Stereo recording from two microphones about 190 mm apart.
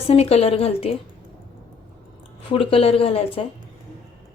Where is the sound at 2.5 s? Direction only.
30° left (ahead or behind).